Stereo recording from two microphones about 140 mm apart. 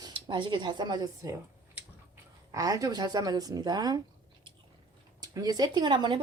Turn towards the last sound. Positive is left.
turn(degrees=-35)  # may be behind; listen again after turning